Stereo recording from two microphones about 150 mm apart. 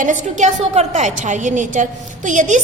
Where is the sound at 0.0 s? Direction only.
55° right (ahead or behind).